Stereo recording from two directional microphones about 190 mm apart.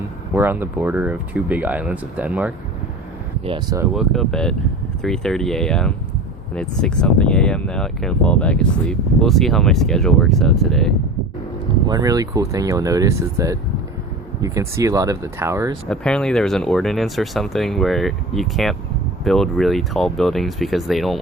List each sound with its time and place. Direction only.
0.3 s speech: 15° right (ahead or behind)
3.4 s speech: 25° right (ahead or behind)
3.9 s speech: centre (ahead or behind)
11.9 s speech: 20° right (ahead or behind)
15.9 s speech: 5° left (ahead or behind)